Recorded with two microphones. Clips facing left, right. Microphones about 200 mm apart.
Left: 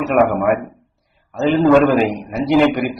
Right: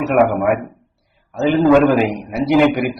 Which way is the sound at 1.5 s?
Centre (ahead or behind).